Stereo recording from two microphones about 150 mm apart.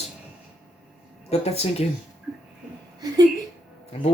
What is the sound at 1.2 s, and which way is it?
Speech, 45° left (ahead or behind).